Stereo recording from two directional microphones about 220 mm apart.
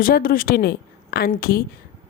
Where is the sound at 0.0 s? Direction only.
40° left (ahead or behind).